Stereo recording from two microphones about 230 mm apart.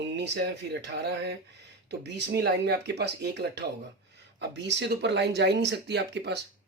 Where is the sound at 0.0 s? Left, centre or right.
Right.